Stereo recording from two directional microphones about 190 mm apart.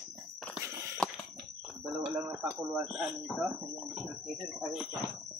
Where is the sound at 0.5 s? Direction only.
15° right (ahead or behind).